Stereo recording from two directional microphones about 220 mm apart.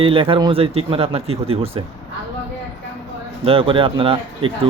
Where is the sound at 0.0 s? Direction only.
25° right (ahead or behind).